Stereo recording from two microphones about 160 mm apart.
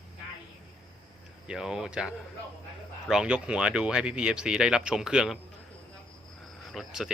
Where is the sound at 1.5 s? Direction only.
5° right (ahead or behind).